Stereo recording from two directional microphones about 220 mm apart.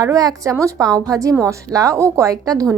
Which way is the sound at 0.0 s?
15° right (ahead or behind).